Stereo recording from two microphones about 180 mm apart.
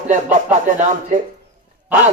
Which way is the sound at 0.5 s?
45° right (ahead or behind).